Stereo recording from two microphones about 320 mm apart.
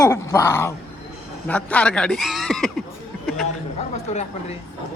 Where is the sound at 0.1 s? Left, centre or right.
Centre.